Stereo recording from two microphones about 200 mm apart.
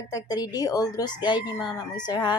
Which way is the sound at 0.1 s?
20° left (ahead or behind).